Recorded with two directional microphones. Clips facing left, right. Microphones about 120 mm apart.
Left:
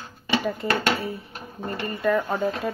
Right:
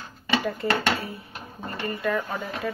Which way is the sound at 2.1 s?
25° left (ahead or behind).